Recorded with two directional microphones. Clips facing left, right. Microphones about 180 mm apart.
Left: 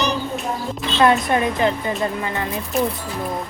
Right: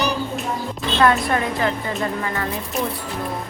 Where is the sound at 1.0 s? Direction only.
20° left (ahead or behind).